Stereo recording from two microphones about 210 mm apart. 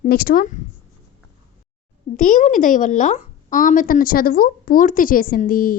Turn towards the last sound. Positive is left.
turn(degrees=40)  # may be behind; listen again after turning